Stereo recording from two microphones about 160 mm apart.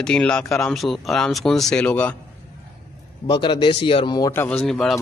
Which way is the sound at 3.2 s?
30° left (ahead or behind).